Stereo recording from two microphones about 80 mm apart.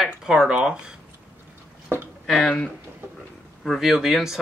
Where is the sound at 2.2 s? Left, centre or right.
Centre.